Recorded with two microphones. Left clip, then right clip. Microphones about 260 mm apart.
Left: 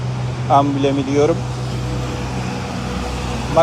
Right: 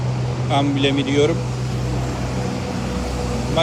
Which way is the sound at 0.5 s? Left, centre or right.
Left.